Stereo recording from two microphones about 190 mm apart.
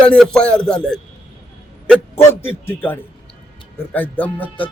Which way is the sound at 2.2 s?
15° left (ahead or behind).